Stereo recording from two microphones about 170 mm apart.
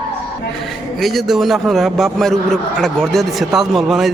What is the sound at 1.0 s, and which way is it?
A man's voice, centre (ahead or behind).